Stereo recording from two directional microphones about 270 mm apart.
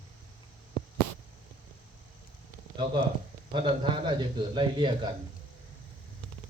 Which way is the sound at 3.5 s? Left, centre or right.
Centre.